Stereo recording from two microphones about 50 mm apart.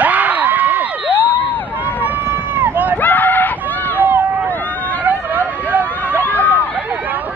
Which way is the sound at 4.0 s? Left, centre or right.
Right.